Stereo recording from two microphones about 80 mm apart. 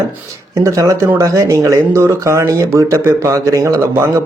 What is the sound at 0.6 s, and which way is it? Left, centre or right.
Speech, right.